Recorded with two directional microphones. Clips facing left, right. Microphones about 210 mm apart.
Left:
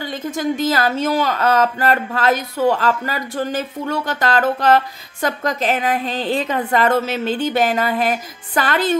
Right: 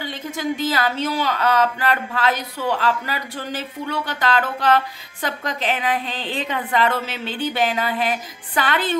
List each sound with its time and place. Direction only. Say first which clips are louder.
0.0 s a woman's voice: left 4 dB; 45° left (ahead or behind)